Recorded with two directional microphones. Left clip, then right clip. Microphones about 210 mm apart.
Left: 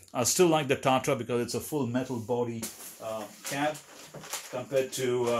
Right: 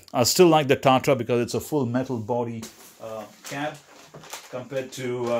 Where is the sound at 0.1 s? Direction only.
40° right (ahead or behind); by 2.3 s 55° right (ahead or behind).